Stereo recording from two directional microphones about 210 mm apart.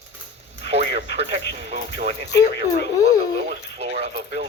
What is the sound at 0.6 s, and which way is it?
Speech, 30° right (ahead or behind).